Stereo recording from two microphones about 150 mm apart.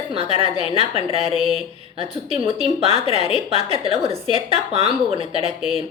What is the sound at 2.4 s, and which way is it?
A woman's voice, 40° right (ahead or behind).